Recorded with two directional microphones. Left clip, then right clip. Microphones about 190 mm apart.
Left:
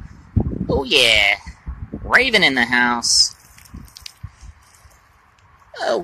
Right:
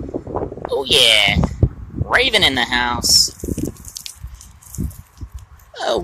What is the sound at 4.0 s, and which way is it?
Squish, 60° right (ahead or behind).